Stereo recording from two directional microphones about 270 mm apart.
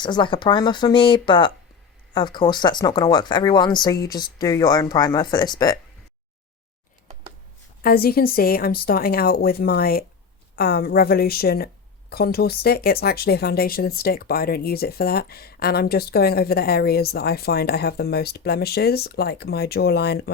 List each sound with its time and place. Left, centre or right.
0.0 s speech: centre
7.8 s speech: left